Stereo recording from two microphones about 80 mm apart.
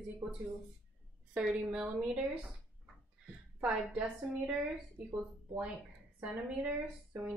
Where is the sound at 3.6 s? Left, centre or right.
Centre.